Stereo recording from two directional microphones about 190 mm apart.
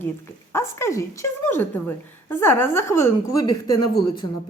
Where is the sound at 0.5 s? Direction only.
15° left (ahead or behind).